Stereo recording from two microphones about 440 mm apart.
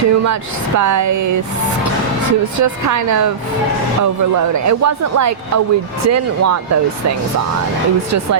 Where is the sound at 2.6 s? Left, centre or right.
Right.